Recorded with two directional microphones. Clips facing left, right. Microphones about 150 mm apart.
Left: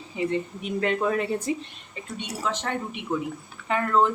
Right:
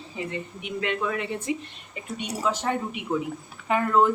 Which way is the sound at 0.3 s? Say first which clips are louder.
Left 5 dB; 40° left (ahead or behind).